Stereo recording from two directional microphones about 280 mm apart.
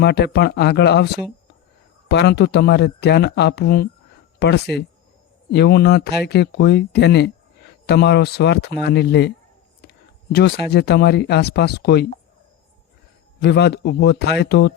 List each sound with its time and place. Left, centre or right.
0.0 s speech: left
10.3 s speech: left
13.4 s speech: left